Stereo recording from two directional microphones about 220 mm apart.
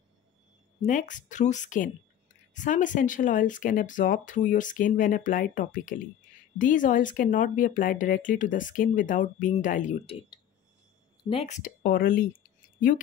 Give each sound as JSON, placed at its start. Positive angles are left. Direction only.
{"t": 0.8, "sound": "speech", "side_deg": 35}
{"t": 11.2, "sound": "speech", "side_deg": 30}